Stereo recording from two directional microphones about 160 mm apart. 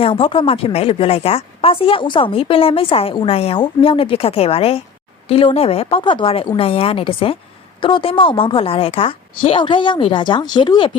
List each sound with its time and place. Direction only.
0.0 s a woman's voice: 35° left (ahead or behind)